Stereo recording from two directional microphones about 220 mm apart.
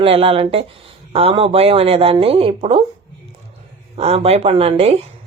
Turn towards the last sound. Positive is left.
turn(degrees=-25)  # may be behind; listen again after turning